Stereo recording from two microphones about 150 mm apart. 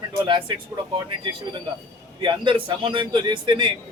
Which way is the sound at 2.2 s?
35° right (ahead or behind).